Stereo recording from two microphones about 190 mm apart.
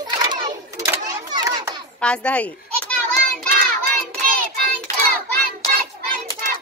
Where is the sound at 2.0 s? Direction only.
5° left (ahead or behind).